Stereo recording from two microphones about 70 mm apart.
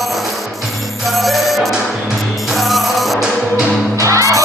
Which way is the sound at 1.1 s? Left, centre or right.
Centre.